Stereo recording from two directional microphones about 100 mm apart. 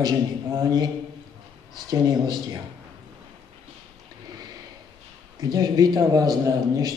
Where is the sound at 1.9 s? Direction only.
40° right (ahead or behind).